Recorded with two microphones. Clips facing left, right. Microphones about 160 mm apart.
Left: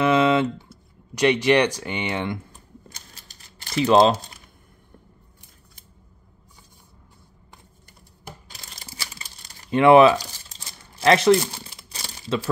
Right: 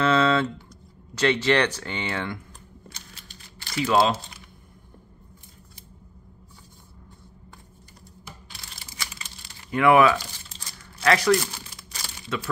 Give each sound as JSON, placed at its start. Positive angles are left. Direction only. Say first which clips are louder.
{"t": 0.0, "sound": "speech", "louder": "left 3 dB", "side_deg": 15}
{"t": 3.7, "sound": "speech", "louder": "left 5 dB", "side_deg": 25}
{"t": 8.5, "sound": "crumpling", "louder": "left 2 dB", "side_deg": 30}